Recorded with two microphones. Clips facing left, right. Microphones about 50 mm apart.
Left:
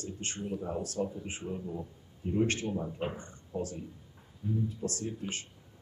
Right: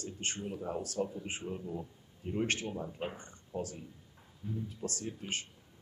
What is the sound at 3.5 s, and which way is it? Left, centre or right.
Speech, centre.